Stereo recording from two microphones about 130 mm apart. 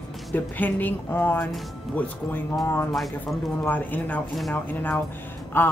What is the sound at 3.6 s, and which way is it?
Speech, 15° left (ahead or behind).